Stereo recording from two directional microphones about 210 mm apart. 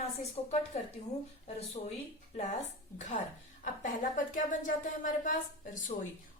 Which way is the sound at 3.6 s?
40° left (ahead or behind).